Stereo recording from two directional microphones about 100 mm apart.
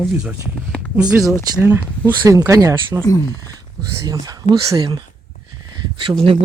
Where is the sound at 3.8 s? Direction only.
40° right (ahead or behind).